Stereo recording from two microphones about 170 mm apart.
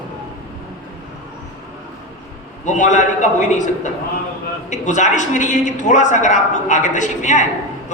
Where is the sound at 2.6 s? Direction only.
45° left (ahead or behind).